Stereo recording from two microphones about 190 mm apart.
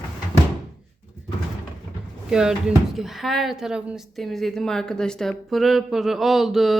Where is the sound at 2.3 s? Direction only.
5° right (ahead or behind).